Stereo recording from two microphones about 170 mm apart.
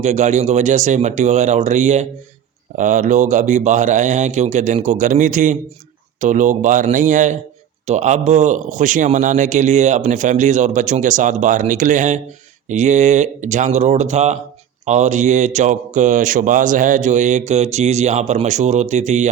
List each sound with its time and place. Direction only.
0.0 s speech: 45° right (ahead or behind)